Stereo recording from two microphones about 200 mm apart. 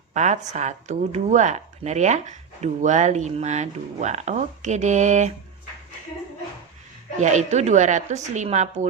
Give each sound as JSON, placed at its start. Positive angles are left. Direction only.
{"t": 0.1, "sound": "speech", "side_deg": -35}
{"t": 7.2, "sound": "speech", "side_deg": -35}